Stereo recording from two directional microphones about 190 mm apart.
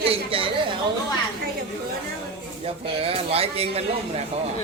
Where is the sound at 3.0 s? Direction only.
30° right (ahead or behind).